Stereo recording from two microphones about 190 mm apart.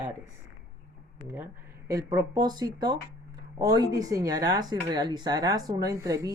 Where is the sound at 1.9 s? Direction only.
20° right (ahead or behind).